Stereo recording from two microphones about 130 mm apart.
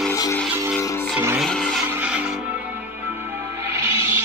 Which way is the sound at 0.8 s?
25° left (ahead or behind).